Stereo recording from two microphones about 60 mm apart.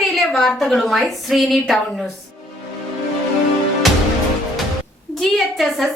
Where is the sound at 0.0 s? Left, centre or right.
Centre.